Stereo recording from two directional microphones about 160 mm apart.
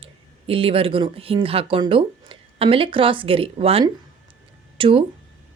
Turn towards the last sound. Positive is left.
turn(degrees=-35)  # may be behind; listen again after turning